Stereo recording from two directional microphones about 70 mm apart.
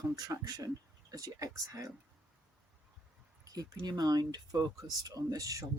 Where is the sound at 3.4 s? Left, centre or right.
Right.